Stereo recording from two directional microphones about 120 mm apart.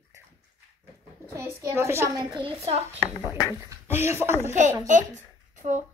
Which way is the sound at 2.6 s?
55° right (ahead or behind).